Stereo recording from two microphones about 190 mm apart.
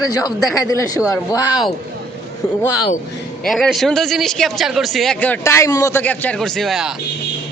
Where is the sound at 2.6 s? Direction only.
20° left (ahead or behind).